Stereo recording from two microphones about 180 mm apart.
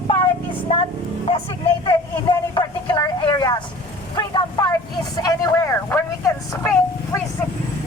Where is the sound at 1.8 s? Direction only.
25° left (ahead or behind).